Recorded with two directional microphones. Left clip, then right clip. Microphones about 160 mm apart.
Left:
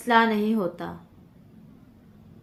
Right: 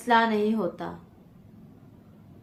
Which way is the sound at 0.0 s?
50° left (ahead or behind).